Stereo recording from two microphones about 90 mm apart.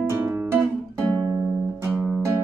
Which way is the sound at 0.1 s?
30° right (ahead or behind).